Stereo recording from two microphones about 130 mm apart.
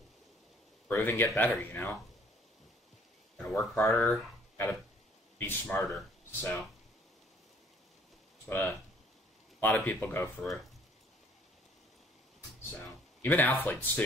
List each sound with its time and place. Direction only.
0.8 s speech: 15° left (ahead or behind)
3.5 s speech: 20° left (ahead or behind)
8.5 s speech: 20° left (ahead or behind)
13.2 s speech: 15° left (ahead or behind)